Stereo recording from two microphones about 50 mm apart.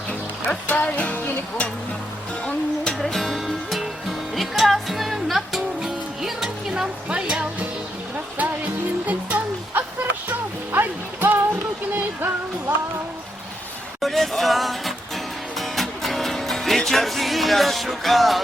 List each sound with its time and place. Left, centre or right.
0.4 s music: left
3.0 s music: centre
8.4 s music: right
9.0 s a sound: right
10.2 s music: right
14.0 s music: centre